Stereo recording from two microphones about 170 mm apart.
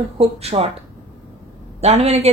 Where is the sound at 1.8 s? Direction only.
40° right (ahead or behind).